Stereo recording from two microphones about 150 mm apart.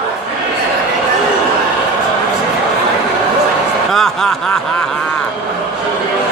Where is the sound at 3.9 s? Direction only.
Centre (ahead or behind).